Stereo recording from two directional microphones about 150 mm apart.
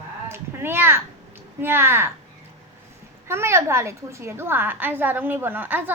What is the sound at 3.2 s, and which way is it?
A woman's voice, 15° right (ahead or behind).